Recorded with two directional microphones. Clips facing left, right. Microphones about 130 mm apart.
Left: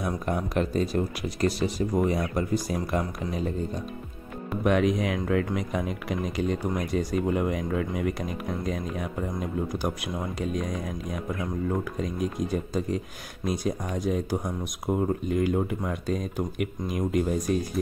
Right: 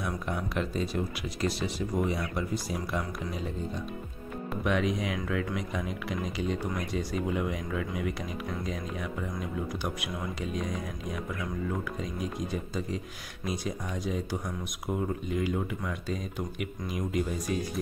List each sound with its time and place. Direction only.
0.0 s speech: 45° left (ahead or behind)
4.6 s speech: 50° left (ahead or behind)
12.0 s speech: 50° left (ahead or behind)